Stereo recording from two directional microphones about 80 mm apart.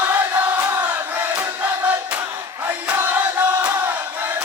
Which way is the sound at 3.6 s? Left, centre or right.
Right.